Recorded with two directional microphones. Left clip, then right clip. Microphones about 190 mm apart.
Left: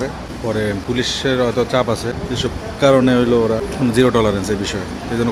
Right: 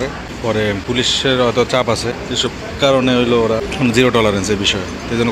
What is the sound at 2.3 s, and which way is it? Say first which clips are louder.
Speech: right 4 dB; 20° left (ahead or behind).